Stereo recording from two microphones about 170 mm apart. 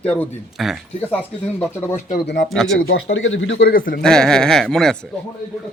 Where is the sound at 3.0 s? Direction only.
90° left; by 4.0 s 55° left (ahead or behind).